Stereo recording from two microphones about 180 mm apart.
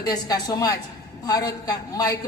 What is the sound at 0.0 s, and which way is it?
A man's voice, 20° left (ahead or behind).